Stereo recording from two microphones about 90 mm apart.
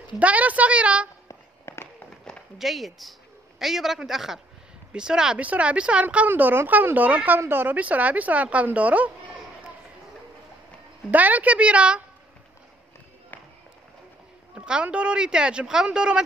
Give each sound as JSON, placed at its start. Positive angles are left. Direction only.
{"t": 0.2, "sound": "speech", "side_deg": -15}
{"t": 1.7, "sound": "run", "side_deg": 30}
{"t": 2.6, "sound": "a woman's voice", "side_deg": 0}
{"t": 11.1, "sound": "speech", "side_deg": -15}
{"t": 14.5, "sound": "speech", "side_deg": -10}